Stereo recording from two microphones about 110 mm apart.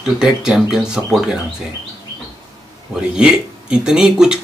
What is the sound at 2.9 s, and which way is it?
Speech, 5° right (ahead or behind).